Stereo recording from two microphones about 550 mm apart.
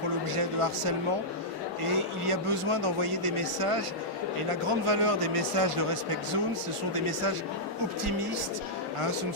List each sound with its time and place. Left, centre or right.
0.3 s a man's voice: right